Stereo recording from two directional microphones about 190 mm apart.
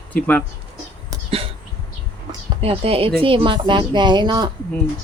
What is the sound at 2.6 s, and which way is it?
Speech, 30° right (ahead or behind).